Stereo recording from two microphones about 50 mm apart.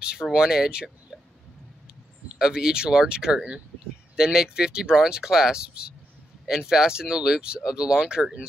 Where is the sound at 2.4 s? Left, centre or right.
Centre.